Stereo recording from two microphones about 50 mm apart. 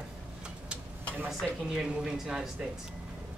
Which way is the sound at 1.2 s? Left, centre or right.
Centre.